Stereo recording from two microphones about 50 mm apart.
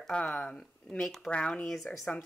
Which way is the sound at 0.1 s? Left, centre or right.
Left.